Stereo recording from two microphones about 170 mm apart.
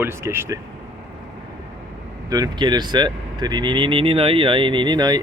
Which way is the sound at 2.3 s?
25° right (ahead or behind).